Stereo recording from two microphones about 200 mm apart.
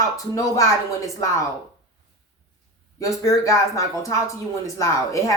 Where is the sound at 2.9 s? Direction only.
15° left (ahead or behind).